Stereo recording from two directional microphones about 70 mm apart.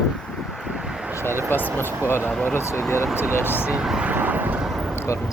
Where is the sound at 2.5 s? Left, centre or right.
Left.